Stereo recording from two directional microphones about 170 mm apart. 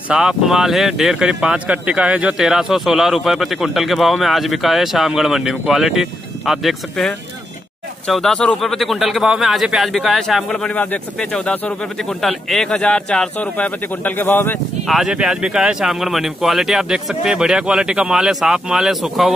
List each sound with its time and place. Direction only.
0.1 s speech: 5° right (ahead or behind)
14.9 s speech: 5° right (ahead or behind)